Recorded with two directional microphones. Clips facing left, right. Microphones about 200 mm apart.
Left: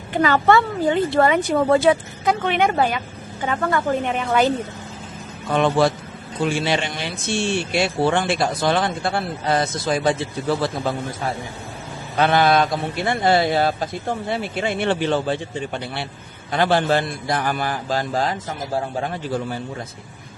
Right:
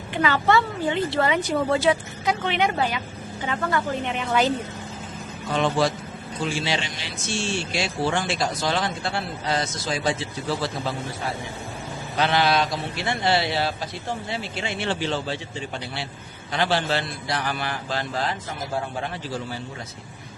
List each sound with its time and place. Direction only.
0.1 s a man's voice: 45° left (ahead or behind)
5.5 s speech: 55° left (ahead or behind)
12.1 s a man's voice: 50° left (ahead or behind)